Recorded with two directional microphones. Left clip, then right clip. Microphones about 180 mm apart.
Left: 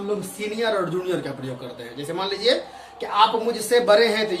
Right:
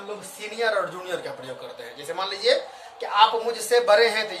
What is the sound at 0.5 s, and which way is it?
Speech, 10° right (ahead or behind).